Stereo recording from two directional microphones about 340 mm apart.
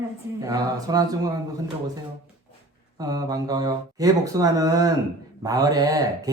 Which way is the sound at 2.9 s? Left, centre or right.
Centre.